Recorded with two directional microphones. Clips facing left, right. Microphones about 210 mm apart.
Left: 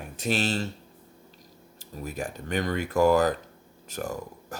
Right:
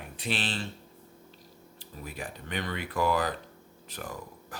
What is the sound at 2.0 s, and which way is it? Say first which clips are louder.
Speech: left 6 dB; 45° left (ahead or behind).